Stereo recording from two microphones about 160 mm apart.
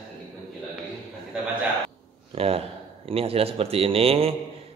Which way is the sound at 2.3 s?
35° right (ahead or behind).